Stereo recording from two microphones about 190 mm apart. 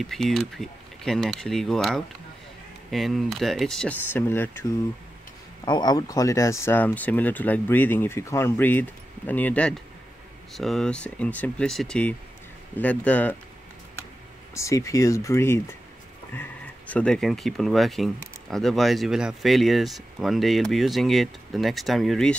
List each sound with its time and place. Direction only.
0.0 s speech: centre (ahead or behind)
5.7 s speech: 20° left (ahead or behind)
14.5 s speech: 15° left (ahead or behind)